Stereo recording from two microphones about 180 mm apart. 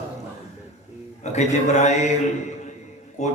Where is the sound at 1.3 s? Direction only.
40° left (ahead or behind).